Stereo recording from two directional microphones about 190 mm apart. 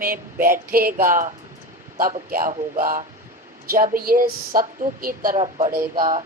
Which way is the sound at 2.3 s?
45° right (ahead or behind).